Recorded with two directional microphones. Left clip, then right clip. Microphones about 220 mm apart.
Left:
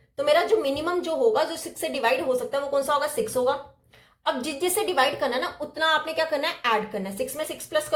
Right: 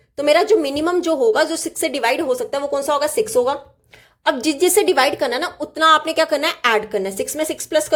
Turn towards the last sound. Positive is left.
turn(degrees=-50)  # may be behind; listen again after turning